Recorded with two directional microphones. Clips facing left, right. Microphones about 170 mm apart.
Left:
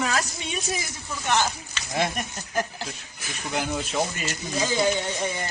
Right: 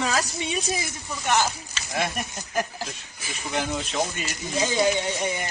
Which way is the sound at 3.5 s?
5° left (ahead or behind).